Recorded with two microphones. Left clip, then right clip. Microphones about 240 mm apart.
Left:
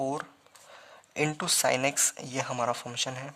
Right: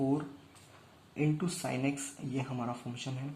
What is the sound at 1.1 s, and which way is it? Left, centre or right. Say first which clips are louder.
Speech: left 7 dB; left.